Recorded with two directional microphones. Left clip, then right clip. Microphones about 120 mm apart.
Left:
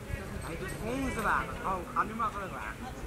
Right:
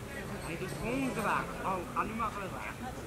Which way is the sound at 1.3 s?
20° left (ahead or behind).